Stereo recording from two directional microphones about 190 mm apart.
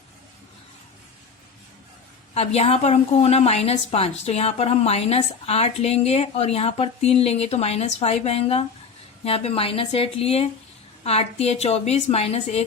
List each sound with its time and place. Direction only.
2.3 s a woman's voice: 35° left (ahead or behind)